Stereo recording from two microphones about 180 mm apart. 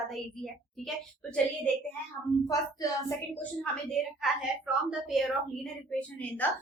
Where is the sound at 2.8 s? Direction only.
20° left (ahead or behind).